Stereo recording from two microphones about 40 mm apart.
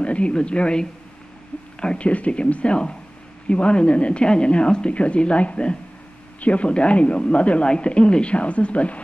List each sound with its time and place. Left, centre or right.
0.0 s speech: left